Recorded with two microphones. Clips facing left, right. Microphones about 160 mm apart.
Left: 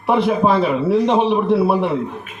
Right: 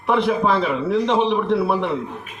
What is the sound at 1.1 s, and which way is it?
Speech, 5° left (ahead or behind).